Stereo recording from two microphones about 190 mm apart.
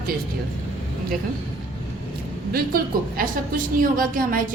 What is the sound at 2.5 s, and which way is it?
A woman's voice, 50° right (ahead or behind).